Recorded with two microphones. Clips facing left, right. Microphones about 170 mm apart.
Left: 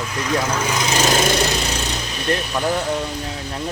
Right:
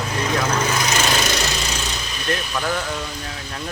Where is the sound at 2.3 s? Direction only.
25° left (ahead or behind).